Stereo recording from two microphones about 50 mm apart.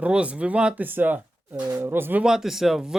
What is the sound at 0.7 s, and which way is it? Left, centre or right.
Speech, right.